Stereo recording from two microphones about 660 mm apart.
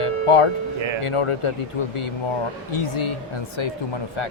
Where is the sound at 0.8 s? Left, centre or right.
Right.